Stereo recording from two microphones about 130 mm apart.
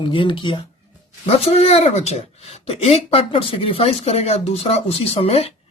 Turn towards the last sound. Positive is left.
turn(degrees=50)  # may be behind; listen again after turning